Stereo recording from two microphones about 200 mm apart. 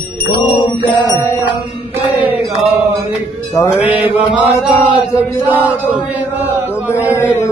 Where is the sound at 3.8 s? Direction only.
10° right (ahead or behind).